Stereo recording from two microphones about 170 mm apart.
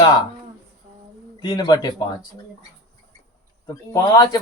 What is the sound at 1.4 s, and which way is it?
Speech, 25° left (ahead or behind).